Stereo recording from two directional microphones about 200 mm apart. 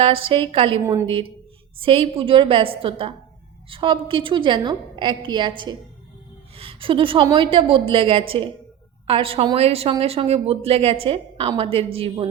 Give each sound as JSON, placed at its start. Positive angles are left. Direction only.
{"t": 0.0, "sound": "speech", "side_deg": -25}